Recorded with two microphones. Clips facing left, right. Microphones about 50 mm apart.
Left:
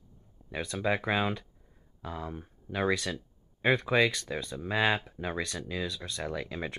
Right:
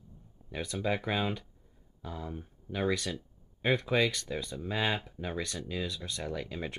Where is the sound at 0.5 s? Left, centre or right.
Left.